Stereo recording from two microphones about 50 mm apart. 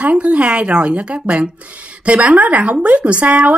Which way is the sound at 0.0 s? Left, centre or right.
Right.